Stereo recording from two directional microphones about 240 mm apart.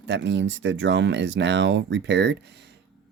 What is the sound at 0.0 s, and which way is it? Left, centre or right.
Speech, right.